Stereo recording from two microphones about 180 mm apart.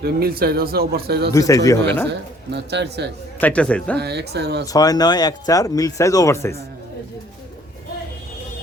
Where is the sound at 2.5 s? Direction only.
70° right (ahead or behind).